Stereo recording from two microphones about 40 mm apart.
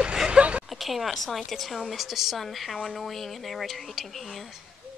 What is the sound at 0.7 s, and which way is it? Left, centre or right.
A woman's voice, centre.